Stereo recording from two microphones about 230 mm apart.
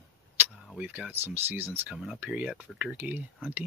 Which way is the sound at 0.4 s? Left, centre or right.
Centre.